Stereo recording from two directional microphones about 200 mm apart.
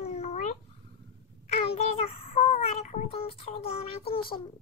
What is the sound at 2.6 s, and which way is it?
A child's voice, 30° left (ahead or behind).